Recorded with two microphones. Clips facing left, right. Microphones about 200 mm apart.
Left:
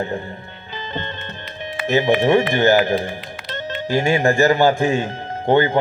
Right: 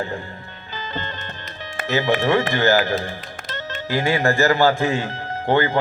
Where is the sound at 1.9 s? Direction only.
20° left (ahead or behind).